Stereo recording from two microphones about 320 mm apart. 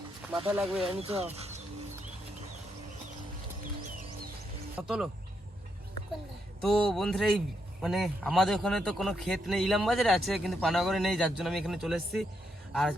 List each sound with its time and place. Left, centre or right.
0.3 s a man's voice: centre
0.9 s speech: centre
4.8 s a man's voice: centre
6.6 s a man's voice: centre